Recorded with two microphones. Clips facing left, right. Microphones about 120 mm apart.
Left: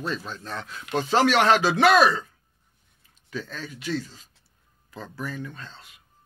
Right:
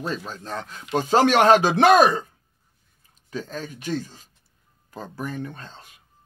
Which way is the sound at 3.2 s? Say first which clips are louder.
Right 3 dB; 40° right (ahead or behind).